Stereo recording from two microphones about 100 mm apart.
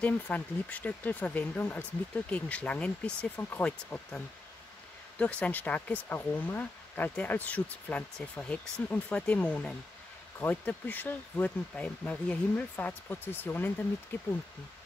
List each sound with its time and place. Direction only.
0.0 s speech: 15° left (ahead or behind)
5.2 s speech: 15° left (ahead or behind)